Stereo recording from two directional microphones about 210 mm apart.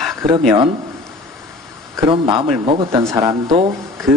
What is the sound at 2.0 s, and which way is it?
Speech, 25° right (ahead or behind).